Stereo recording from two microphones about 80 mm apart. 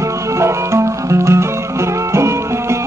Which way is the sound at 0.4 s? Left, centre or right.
Right.